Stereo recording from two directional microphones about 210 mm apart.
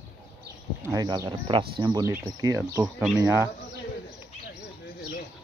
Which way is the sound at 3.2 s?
15° right (ahead or behind).